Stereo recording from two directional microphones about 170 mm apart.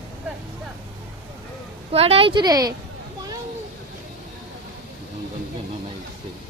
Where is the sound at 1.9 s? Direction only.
35° right (ahead or behind).